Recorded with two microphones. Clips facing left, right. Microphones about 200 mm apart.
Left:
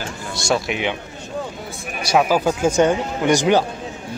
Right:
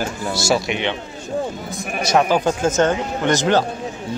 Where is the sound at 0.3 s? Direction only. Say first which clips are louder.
Right 1 dB; 5° right (ahead or behind).